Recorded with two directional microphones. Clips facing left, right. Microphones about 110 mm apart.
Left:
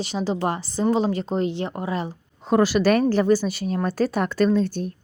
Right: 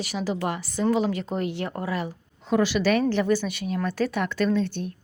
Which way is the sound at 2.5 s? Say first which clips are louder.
Left 4 dB; 45° left (ahead or behind).